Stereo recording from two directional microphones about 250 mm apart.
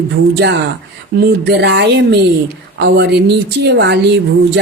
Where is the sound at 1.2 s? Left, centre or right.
Right.